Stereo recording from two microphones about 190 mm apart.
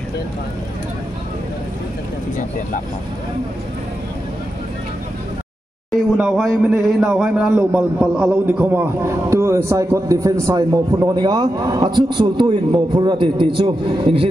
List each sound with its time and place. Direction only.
5.9 s a man's voice: centre (ahead or behind); by 14.2 s 30° right (ahead or behind)